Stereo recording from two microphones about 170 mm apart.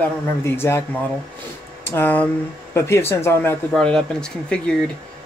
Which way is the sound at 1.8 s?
10° left (ahead or behind).